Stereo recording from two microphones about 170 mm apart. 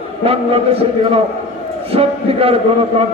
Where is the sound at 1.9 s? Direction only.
35° right (ahead or behind).